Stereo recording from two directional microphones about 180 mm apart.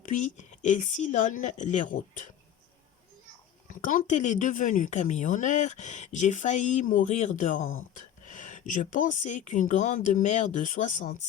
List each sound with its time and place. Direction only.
0.0 s speech: 45° left (ahead or behind)
3.7 s speech: 50° left (ahead or behind)